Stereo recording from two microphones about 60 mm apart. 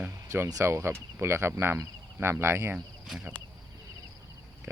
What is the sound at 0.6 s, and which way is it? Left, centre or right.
Speech, right.